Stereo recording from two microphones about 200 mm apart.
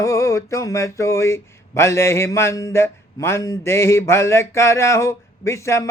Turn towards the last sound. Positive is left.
turn(degrees=15)  # may be behind; listen again after turning